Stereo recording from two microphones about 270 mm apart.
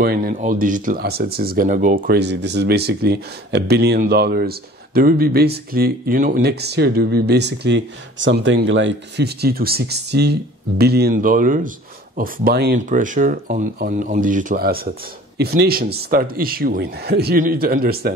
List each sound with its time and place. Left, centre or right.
0.0 s speech: right